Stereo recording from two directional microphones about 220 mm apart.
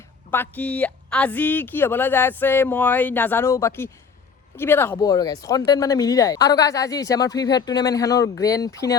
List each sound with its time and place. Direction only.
0.3 s speech: 10° left (ahead or behind)